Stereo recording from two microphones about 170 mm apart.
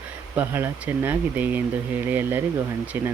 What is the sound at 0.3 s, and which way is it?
Speech, 10° right (ahead or behind).